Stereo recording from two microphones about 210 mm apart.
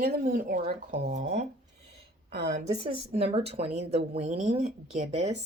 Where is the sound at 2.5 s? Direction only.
30° right (ahead or behind).